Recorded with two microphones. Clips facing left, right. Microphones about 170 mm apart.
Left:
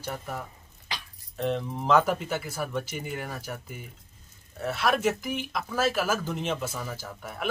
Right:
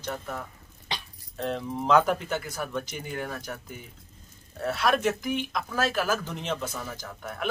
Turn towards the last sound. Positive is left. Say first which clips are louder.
# right 1 dB
turn(degrees=5)  # may be behind; listen again after turning